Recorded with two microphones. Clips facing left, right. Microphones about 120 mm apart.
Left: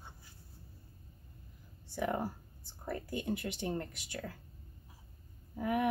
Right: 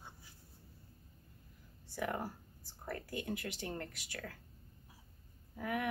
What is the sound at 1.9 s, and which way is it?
Speech, 25° left (ahead or behind).